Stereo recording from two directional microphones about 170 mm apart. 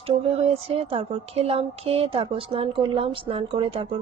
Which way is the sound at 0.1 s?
35° right (ahead or behind).